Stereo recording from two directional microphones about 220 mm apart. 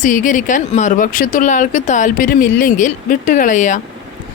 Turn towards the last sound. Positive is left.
turn(degrees=35)  # may be behind; listen again after turning